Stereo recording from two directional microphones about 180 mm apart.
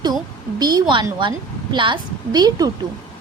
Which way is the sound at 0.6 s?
25° right (ahead or behind).